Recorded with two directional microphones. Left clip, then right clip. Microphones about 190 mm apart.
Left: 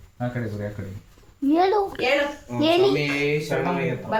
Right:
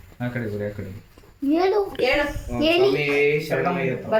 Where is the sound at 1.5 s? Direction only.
15° left (ahead or behind).